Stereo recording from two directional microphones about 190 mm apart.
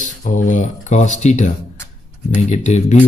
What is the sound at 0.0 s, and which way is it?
Speech, 40° left (ahead or behind).